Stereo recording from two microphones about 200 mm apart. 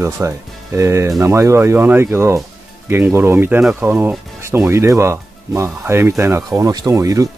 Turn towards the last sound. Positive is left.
turn(degrees=-15)  # may be behind; listen again after turning